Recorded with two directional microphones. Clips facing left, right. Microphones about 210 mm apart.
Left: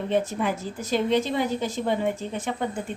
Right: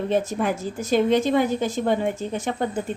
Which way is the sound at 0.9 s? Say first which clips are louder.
Right 4 dB; 50° right (ahead or behind).